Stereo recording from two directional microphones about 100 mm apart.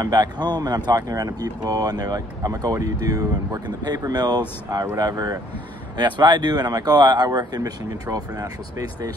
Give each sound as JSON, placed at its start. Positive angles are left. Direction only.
{"t": 0.0, "sound": "speech", "side_deg": -45}